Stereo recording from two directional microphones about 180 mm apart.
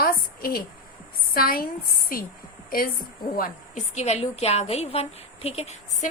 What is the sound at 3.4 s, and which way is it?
A woman's voice, 40° left (ahead or behind).